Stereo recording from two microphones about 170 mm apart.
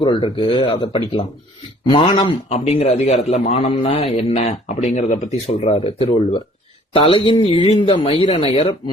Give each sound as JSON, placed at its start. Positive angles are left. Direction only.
{"t": 0.0, "sound": "speech", "side_deg": 30}
{"t": 2.5, "sound": "a man's voice", "side_deg": 40}